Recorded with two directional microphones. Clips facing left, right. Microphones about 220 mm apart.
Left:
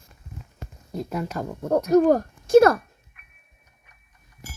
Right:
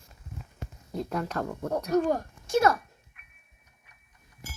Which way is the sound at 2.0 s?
40° left (ahead or behind).